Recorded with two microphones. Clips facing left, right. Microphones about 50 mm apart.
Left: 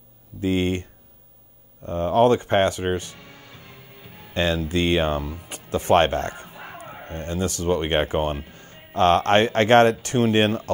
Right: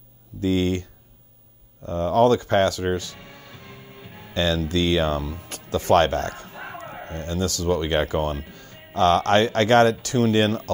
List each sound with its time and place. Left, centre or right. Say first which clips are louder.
0.4 s speech: right 1 dB; left
1.9 s speech: even; left
4.3 s speech: even; left